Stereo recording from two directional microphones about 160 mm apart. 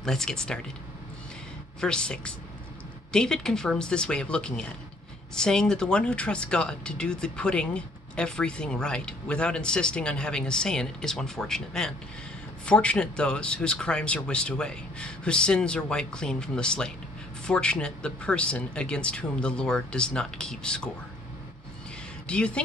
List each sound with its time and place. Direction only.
0.0 s speech: 5° left (ahead or behind)
1.8 s speech: 5° left (ahead or behind)
22.3 s speech: 5° left (ahead or behind)